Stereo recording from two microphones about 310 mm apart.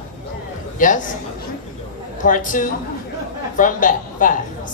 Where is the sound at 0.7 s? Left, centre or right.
Left.